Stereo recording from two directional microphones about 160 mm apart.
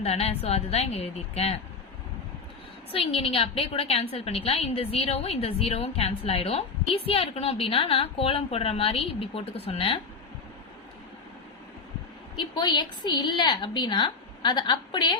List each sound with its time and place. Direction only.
0.0 s a woman's voice: 40° left (ahead or behind)
2.9 s a woman's voice: 40° left (ahead or behind)
12.4 s a woman's voice: 30° left (ahead or behind)